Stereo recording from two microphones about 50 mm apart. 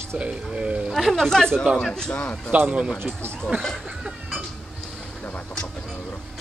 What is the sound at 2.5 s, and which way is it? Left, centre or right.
Speech, right.